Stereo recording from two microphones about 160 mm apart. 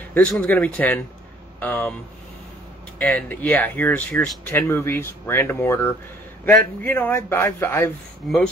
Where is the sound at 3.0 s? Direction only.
10° left (ahead or behind).